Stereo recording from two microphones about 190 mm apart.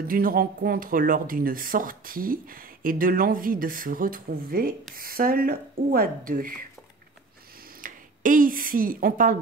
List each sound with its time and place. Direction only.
0.0 s speech: 50° right (ahead or behind)
7.8 s speech: 45° right (ahead or behind)